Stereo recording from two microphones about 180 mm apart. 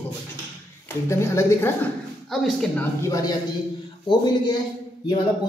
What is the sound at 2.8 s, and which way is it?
Speech, 15° left (ahead or behind).